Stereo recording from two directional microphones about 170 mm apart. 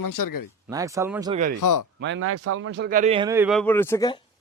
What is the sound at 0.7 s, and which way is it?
Speech, 20° right (ahead or behind).